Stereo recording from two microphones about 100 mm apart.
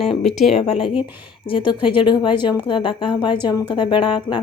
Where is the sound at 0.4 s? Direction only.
75° left (ahead or behind).